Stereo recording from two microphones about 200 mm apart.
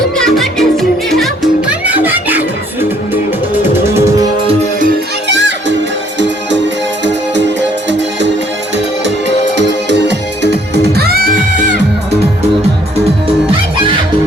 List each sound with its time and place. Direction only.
0.2 s music: centre (ahead or behind)
5.3 s music: 60° right (ahead or behind); by 11.7 s 45° right (ahead or behind)